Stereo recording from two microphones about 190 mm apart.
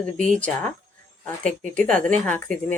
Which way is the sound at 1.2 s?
5° left (ahead or behind).